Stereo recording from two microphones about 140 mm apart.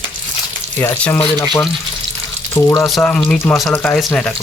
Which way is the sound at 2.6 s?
25° left (ahead or behind).